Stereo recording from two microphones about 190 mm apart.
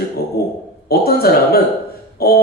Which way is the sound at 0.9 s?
55° left (ahead or behind).